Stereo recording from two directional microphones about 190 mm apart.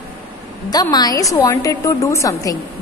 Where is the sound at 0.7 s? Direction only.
20° left (ahead or behind).